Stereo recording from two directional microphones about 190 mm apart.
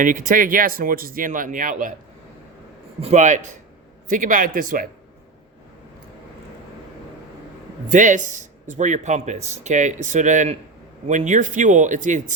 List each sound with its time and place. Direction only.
0.0 s speech: 45° right (ahead or behind)
3.0 s speech: 35° right (ahead or behind)
7.9 s speech: 40° right (ahead or behind)